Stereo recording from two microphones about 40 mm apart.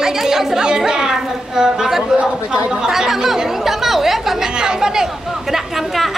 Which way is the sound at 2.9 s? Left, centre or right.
Centre.